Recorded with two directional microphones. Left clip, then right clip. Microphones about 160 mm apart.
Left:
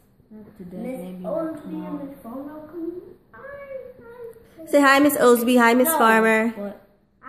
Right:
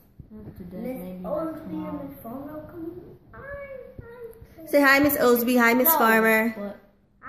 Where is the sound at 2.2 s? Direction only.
30° right (ahead or behind).